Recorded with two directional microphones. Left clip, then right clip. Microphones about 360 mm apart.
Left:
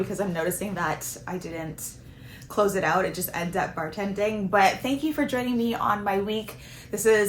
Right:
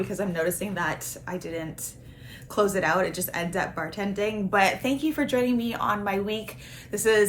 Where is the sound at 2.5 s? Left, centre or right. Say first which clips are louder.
Even; centre.